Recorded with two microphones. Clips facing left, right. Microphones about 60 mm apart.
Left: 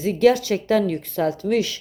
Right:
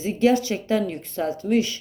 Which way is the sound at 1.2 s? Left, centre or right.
Left.